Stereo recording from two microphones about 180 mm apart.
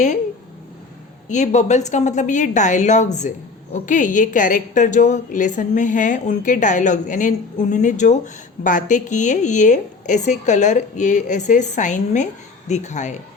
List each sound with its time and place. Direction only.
1.3 s a woman's voice: 40° left (ahead or behind)